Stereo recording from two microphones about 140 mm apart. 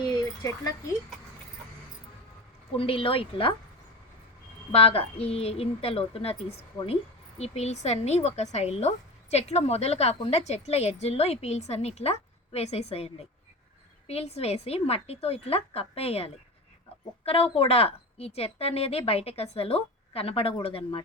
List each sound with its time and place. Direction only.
0.0 s a sound: 30° left (ahead or behind)
2.7 s speech: 40° left (ahead or behind)
4.7 s a woman's voice: 45° left (ahead or behind)